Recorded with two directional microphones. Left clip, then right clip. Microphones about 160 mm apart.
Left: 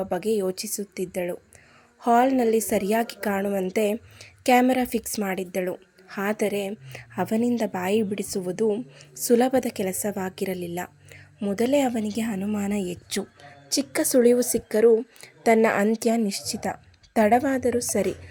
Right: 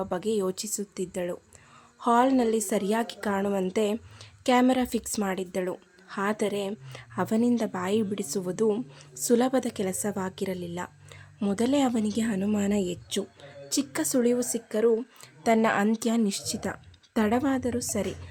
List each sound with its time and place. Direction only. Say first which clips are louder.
0.0 s a woman's voice: left 3 dB; 10° left (ahead or behind)
10.8 s whispering: left 3 dB; 5° left (ahead or behind)
11.5 s a woman's voice: left 4 dB; 5° left (ahead or behind)
13.7 s a woman's voice: left 4 dB; 20° left (ahead or behind)